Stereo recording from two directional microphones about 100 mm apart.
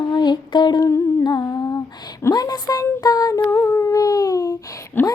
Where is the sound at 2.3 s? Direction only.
40° left (ahead or behind).